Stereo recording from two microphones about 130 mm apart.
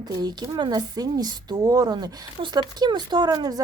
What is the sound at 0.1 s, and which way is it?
A woman's voice, 30° right (ahead or behind).